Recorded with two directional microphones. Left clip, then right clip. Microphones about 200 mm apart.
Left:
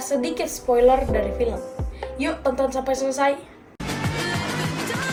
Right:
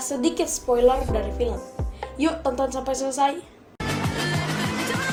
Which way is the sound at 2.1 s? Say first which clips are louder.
Left 1 dB; 30° right (ahead or behind).